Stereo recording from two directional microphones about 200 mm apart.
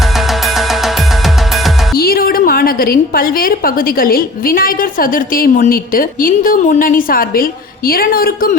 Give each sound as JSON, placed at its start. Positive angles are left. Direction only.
{"t": 0.4, "sound": "music", "side_deg": 0}
{"t": 2.0, "sound": "a woman's voice", "side_deg": 50}